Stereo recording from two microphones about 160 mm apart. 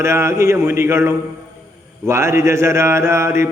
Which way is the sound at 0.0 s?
15° right (ahead or behind).